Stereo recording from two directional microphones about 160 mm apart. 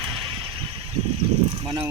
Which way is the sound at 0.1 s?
30° right (ahead or behind).